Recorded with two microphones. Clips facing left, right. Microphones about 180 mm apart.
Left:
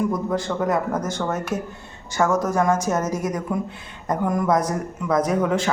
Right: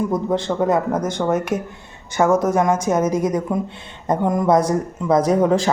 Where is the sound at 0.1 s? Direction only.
25° right (ahead or behind).